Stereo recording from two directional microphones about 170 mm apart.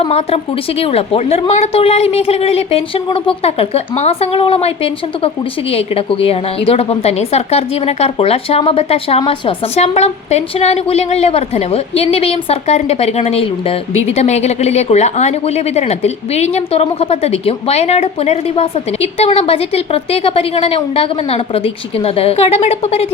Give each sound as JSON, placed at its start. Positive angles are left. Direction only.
{"t": 0.0, "sound": "speech", "side_deg": 35}